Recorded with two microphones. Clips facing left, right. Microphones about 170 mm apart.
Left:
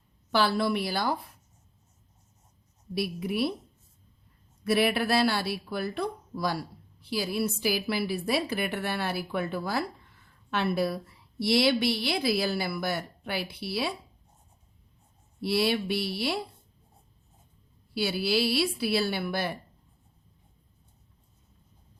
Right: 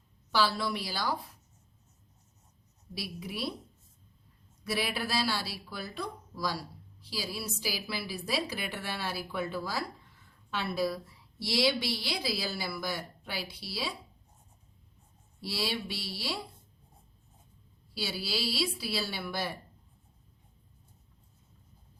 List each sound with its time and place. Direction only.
0.3 s speech: 55° left (ahead or behind)
2.9 s speech: 55° left (ahead or behind)
4.6 s speech: 60° left (ahead or behind)
15.4 s speech: 60° left (ahead or behind)
17.9 s speech: 60° left (ahead or behind)